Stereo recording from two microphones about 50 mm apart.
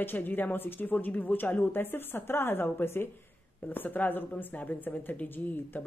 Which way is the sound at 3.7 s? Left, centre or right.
Left.